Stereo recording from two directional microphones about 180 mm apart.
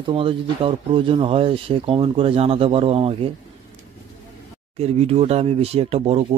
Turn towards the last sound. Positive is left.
turn(degrees=-35)  # may be behind; listen again after turning